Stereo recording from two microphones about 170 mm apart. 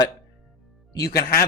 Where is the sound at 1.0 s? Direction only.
65° left (ahead or behind).